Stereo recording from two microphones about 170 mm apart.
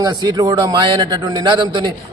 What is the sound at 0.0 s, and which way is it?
Speech, 25° right (ahead or behind).